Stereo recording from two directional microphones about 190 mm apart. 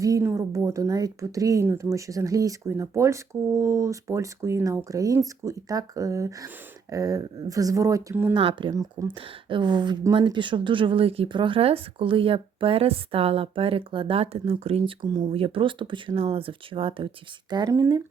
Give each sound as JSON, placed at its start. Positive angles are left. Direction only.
{"t": 0.0, "sound": "speech", "side_deg": -15}
{"t": 8.3, "sound": "speech", "side_deg": -25}